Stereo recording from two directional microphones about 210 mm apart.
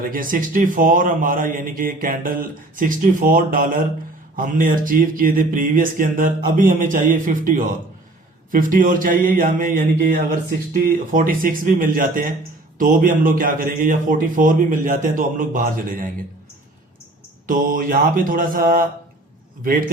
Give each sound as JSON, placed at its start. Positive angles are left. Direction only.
{"t": 0.0, "sound": "a man's voice", "side_deg": -40}
{"t": 17.4, "sound": "a man's voice", "side_deg": -40}